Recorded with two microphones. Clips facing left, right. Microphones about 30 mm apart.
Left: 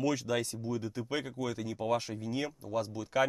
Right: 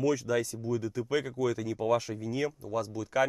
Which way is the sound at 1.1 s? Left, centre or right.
Centre.